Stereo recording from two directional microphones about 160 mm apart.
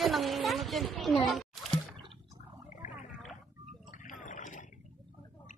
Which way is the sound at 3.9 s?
55° left (ahead or behind).